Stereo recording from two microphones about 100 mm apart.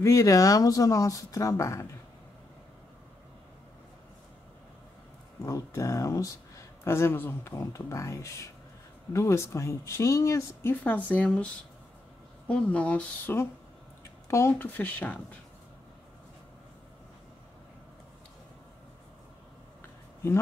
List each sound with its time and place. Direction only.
0.0 s speech: 35° left (ahead or behind)
5.4 s speech: 35° left (ahead or behind); by 11.4 s 10° left (ahead or behind)
12.4 s speech: 10° left (ahead or behind)
14.2 s speech: 30° left (ahead or behind)
14.6 s speech: 15° left (ahead or behind)